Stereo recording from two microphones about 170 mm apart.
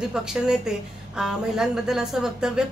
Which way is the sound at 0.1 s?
5° right (ahead or behind).